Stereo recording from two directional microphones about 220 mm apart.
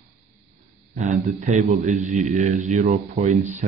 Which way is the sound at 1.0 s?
35° right (ahead or behind).